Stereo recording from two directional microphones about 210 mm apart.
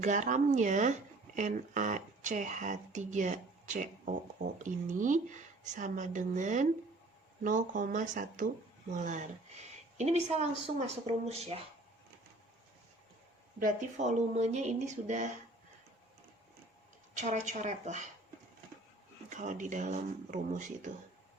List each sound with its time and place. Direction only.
0.0 s speech: 35° right (ahead or behind)
13.6 s speech: 35° right (ahead or behind)
17.2 s speech: 35° right (ahead or behind)
19.3 s speech: 35° right (ahead or behind)